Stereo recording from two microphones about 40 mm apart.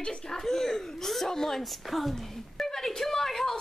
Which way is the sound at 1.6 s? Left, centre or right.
Centre.